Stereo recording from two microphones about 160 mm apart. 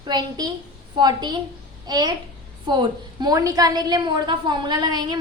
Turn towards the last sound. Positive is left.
turn(degrees=-25)  # may be behind; listen again after turning